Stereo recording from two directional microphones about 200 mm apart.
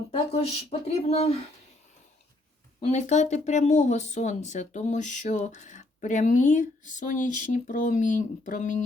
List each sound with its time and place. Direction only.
0.7 s speech: 30° left (ahead or behind)
2.8 s speech: 35° left (ahead or behind)